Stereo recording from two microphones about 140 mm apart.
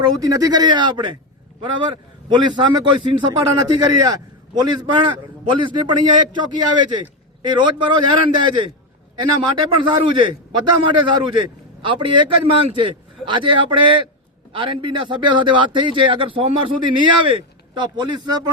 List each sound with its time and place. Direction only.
0.0 s a man's voice: 25° right (ahead or behind)
9.9 s a man's voice: 35° right (ahead or behind)